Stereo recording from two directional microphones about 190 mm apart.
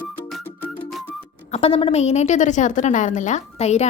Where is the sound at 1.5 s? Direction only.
30° left (ahead or behind).